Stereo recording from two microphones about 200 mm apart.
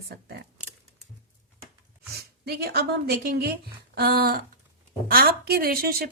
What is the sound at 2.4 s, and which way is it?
A woman's voice, 55° right (ahead or behind).